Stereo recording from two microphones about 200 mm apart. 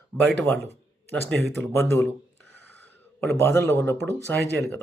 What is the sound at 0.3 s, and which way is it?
Speech, 10° left (ahead or behind).